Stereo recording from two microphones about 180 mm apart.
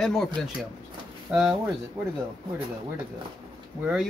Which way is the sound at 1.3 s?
5° right (ahead or behind).